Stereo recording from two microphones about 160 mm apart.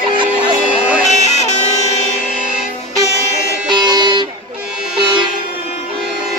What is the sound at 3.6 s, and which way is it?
Music, 25° right (ahead or behind).